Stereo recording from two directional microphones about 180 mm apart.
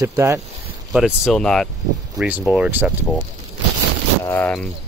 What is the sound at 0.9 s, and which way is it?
Speech, 5° right (ahead or behind).